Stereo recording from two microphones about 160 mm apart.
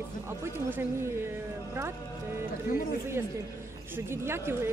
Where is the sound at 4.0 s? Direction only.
15° right (ahead or behind).